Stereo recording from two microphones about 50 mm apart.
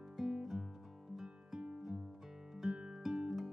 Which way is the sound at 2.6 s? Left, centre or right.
Centre.